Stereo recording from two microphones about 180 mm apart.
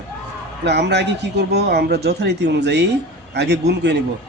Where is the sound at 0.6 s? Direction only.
70° right (ahead or behind).